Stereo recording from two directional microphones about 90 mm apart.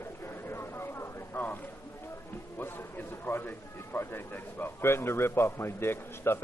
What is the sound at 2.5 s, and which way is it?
A man's voice, 25° left (ahead or behind).